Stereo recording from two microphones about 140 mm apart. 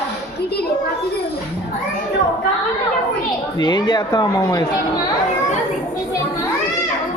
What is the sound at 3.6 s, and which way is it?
Speech, 35° left (ahead or behind).